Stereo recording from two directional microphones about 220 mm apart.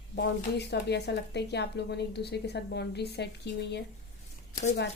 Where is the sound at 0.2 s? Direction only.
50° left (ahead or behind).